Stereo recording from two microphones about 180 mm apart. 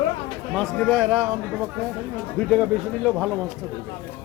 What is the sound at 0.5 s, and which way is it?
Speech, centre (ahead or behind).